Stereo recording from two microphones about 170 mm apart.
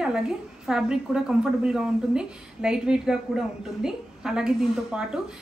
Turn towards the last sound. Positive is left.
turn(degrees=-5)  # may be behind; listen again after turning